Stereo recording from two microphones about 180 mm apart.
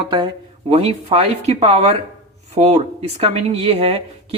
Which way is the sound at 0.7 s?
35° right (ahead or behind).